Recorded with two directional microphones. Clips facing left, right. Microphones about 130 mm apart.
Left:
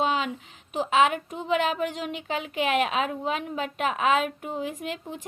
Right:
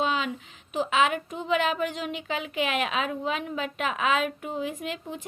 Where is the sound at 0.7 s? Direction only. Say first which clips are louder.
Left 2 dB; 45° left (ahead or behind).